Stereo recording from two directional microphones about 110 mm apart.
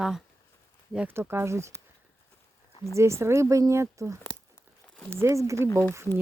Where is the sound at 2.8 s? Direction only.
25° right (ahead or behind).